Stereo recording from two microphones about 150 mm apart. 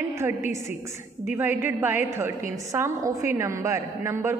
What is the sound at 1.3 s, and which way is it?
A man's voice, 15° right (ahead or behind).